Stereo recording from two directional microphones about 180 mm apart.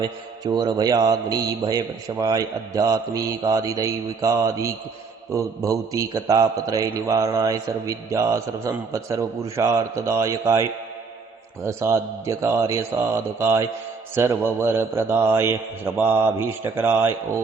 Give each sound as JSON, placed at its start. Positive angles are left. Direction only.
{"t": 0.0, "sound": "mantra", "side_deg": -25}
{"t": 5.3, "sound": "a man's voice", "side_deg": -20}